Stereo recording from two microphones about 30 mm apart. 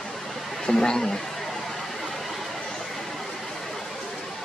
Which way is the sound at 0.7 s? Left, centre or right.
Centre.